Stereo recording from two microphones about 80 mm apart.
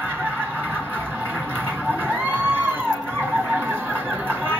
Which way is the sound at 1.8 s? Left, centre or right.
Right.